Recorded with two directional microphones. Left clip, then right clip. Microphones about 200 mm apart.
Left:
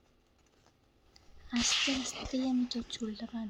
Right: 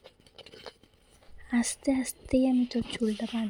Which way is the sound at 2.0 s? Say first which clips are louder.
Right 8 dB; 35° right (ahead or behind).